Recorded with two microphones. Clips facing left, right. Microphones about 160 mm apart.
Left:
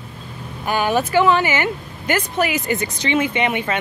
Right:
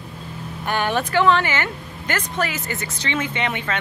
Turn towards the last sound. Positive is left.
turn(degrees=15)  # may be behind; listen again after turning